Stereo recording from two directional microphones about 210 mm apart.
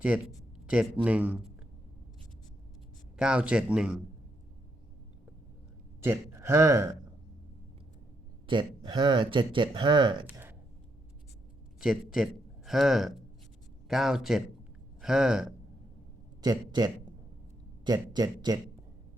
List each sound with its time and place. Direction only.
0.1 s speech: 5° right (ahead or behind)
3.2 s speech: 5° right (ahead or behind)
6.0 s speech: 15° right (ahead or behind)
8.4 s speech: 20° right (ahead or behind)
10.2 s a sound: 10° right (ahead or behind)
11.8 s a man's voice: centre (ahead or behind)
16.4 s a man's voice: 20° right (ahead or behind)